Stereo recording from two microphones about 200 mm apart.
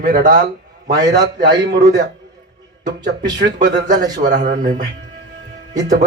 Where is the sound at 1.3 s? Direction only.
60° right (ahead or behind).